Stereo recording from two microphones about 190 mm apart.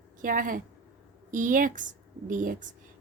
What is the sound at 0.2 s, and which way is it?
A woman's voice, 45° right (ahead or behind).